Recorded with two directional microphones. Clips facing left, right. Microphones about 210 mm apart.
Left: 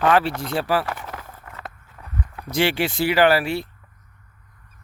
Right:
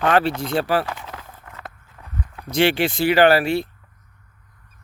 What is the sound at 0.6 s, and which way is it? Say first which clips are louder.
Speech: right 1 dB; 25° right (ahead or behind).